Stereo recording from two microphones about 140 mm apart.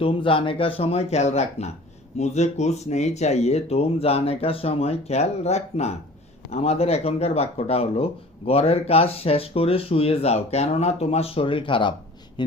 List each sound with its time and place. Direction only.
0.0 s speech: 40° left (ahead or behind)